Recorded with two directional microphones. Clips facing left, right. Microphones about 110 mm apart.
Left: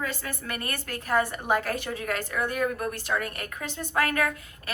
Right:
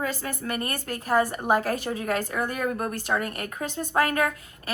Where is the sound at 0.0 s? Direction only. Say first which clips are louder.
Right 4 dB; 35° right (ahead or behind).